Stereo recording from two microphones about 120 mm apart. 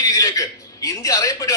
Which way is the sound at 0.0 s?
30° left (ahead or behind).